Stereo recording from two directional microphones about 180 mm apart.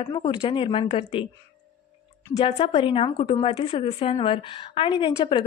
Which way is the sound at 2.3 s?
35° left (ahead or behind).